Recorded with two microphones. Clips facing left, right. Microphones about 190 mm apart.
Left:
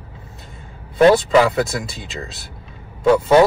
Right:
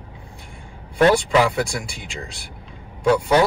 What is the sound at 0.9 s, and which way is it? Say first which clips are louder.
A man's voice: left 4 dB; 20° left (ahead or behind).